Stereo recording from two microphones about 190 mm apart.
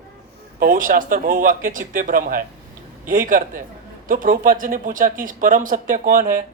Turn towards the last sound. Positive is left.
turn(degrees=-45)  # may be behind; listen again after turning